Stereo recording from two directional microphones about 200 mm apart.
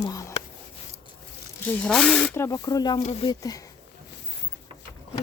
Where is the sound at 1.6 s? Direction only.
5° left (ahead or behind).